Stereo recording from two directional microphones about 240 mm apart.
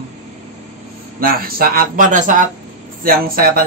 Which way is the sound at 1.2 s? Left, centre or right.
Right.